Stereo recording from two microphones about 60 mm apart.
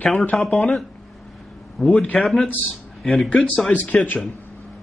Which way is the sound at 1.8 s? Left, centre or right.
Centre.